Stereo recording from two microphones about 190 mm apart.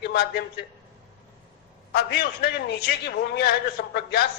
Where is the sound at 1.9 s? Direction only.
55° left (ahead or behind).